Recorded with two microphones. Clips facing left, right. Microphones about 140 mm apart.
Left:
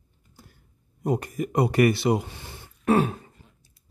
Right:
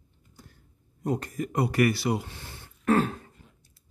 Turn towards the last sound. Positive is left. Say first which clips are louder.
# left 2 dB
turn(degrees=10)  # may be behind; listen again after turning